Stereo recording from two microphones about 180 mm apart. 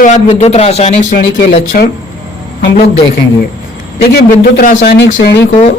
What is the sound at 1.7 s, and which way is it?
Speech, 50° left (ahead or behind).